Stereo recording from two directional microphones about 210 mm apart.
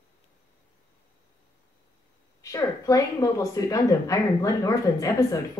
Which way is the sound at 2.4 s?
15° left (ahead or behind).